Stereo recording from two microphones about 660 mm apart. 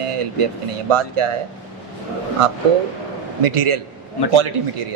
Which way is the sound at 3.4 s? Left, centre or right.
Right.